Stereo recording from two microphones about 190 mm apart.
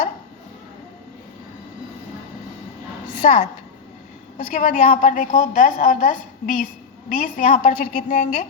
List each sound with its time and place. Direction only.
3.2 s a woman's voice: 40° left (ahead or behind)